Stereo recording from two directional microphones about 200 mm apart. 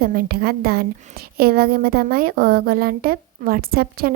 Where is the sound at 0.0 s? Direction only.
50° right (ahead or behind).